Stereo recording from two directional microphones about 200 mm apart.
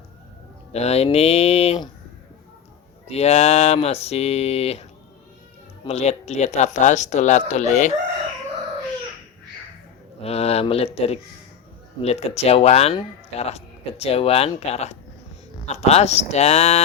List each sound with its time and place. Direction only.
0.7 s speech: 30° left (ahead or behind)
3.1 s speech: 30° left (ahead or behind)
10.2 s speech: 30° left (ahead or behind)